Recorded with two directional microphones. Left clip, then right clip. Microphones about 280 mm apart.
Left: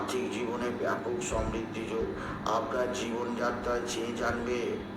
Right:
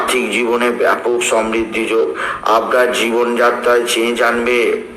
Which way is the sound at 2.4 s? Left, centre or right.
Right.